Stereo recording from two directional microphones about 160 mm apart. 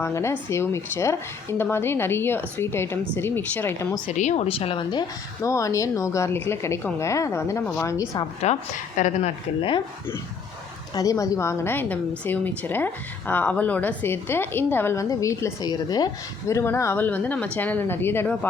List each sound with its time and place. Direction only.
0.0 s a woman's voice: 15° left (ahead or behind)
4.1 s speech: 50° left (ahead or behind); by 8.2 s 20° left (ahead or behind)
8.4 s speech: 50° left (ahead or behind)
10.9 s a woman's voice: 20° left (ahead or behind)